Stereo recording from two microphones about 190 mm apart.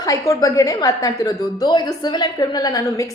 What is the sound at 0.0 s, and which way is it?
A woman's voice, 20° left (ahead or behind).